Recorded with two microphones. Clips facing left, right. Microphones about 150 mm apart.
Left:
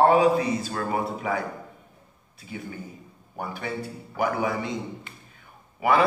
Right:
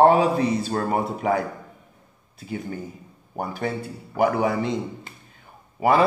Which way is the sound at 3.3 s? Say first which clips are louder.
Right 4 dB; 40° right (ahead or behind).